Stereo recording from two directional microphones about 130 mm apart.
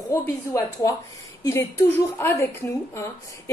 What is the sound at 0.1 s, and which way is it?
A woman's voice, 20° left (ahead or behind).